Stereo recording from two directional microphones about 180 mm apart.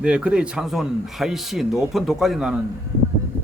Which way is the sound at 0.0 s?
5° right (ahead or behind).